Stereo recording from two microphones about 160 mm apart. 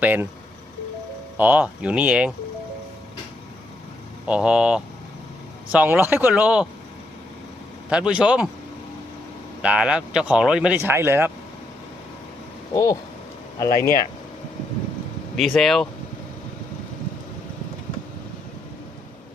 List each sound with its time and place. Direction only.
0.0 s speech: 10° right (ahead or behind)
1.4 s speech: 10° right (ahead or behind)
4.3 s speech: 5° right (ahead or behind)
7.9 s speech: 5° right (ahead or behind)
9.6 s speech: 5° right (ahead or behind)
12.7 s speech: 20° left (ahead or behind)
15.4 s speech: centre (ahead or behind)